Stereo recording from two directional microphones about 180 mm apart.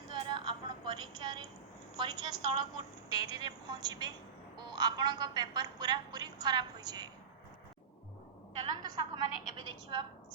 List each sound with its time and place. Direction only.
0.1 s music: 25° right (ahead or behind)
2.0 s a woman's voice: 25° right (ahead or behind)
8.8 s a woman's voice: 20° right (ahead or behind)